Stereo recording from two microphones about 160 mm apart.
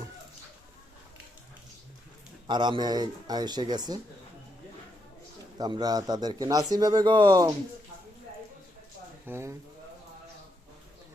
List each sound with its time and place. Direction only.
2.5 s a man's voice: 30° right (ahead or behind)
5.5 s a man's voice: 25° right (ahead or behind)
9.2 s speech: 15° right (ahead or behind)